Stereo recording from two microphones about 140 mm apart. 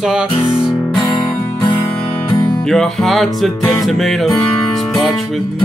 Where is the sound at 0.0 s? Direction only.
5° right (ahead or behind).